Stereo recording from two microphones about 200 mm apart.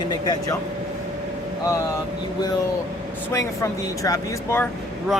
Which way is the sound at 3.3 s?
15° left (ahead or behind).